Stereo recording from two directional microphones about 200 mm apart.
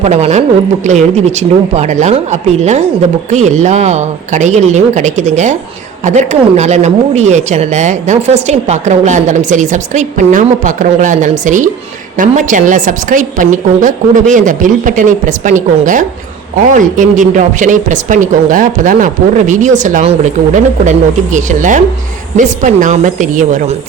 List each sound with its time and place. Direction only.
0.0 s a woman's voice: 35° right (ahead or behind)